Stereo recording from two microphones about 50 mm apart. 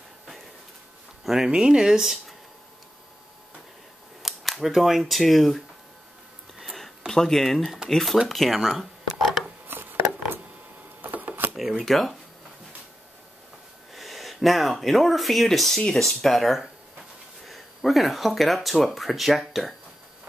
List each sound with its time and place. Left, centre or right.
1.2 s speech: centre
4.2 s speech: centre
6.6 s a sound: centre
7.1 s speech: centre
8.3 s a sound: centre
11.0 s camera: right
11.8 s speech: centre
13.9 s speech: centre